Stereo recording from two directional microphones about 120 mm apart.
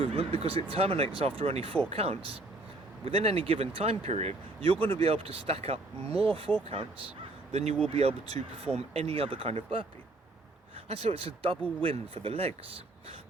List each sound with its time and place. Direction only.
0.0 s speech: 50° right (ahead or behind)
7.9 s speech: 55° right (ahead or behind)
10.8 s speech: 60° right (ahead or behind)